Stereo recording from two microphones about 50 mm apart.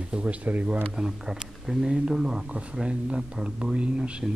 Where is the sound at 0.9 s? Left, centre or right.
Centre.